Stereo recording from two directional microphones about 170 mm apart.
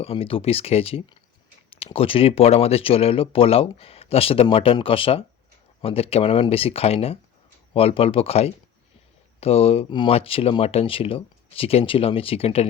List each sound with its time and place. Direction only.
0.0 s speech: 35° left (ahead or behind)